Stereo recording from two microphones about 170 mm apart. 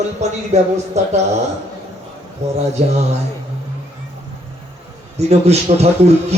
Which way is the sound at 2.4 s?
40° right (ahead or behind).